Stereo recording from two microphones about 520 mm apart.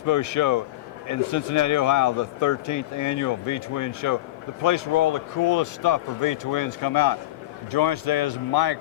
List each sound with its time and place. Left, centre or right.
0.0 s a man's voice: left